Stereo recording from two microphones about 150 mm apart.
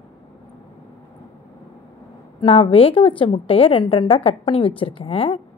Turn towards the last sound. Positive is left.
turn(degrees=40)  # may be behind; listen again after turning